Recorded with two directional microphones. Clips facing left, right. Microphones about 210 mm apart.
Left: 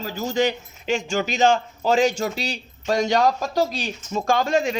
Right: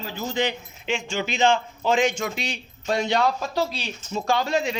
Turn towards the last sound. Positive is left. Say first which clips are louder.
# left 3 dB
turn(degrees=50)  # may be behind; listen again after turning